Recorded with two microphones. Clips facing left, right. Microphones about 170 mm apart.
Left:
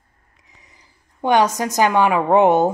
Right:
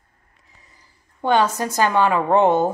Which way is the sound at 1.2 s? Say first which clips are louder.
Left 2 dB; 15° left (ahead or behind).